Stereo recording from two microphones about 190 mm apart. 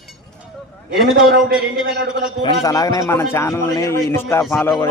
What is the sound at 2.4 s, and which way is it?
Speech, 20° left (ahead or behind).